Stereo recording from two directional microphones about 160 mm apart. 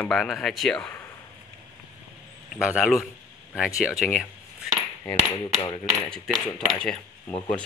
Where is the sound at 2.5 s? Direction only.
5° right (ahead or behind).